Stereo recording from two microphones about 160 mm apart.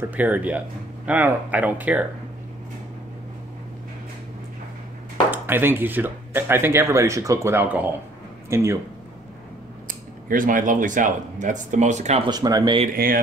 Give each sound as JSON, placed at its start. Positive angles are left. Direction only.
{"t": 0.1, "sound": "speech", "side_deg": -10}
{"t": 5.3, "sound": "speech", "side_deg": -15}
{"t": 9.8, "sound": "speech", "side_deg": -60}
{"t": 12.3, "sound": "speech", "side_deg": -25}
{"t": 12.9, "sound": "speech", "side_deg": -65}